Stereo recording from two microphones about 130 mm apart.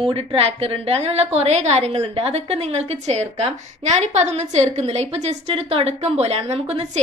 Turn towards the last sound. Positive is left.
turn(degrees=-50)  # may be behind; listen again after turning